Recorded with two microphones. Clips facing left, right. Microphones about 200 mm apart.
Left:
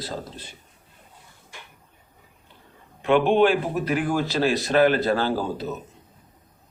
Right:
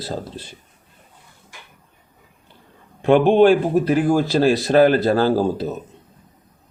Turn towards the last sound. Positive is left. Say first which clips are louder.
# right 7 dB
turn(degrees=-35)  # may be behind; listen again after turning